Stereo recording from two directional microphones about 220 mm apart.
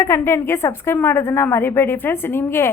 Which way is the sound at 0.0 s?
10° left (ahead or behind).